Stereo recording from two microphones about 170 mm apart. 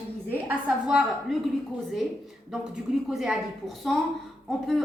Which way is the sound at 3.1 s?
Centre (ahead or behind).